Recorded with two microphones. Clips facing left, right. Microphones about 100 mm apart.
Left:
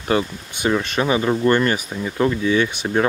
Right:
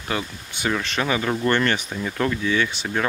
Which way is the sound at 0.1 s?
30° left (ahead or behind).